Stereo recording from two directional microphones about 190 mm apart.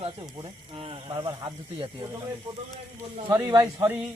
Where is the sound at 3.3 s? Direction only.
20° right (ahead or behind).